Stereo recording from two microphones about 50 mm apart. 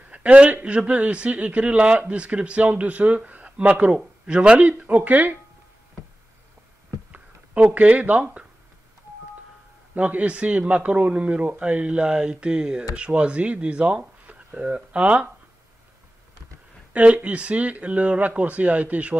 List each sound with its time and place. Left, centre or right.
0.1 s a man's voice: right
7.7 s speech: right
9.9 s speech: right
16.9 s speech: right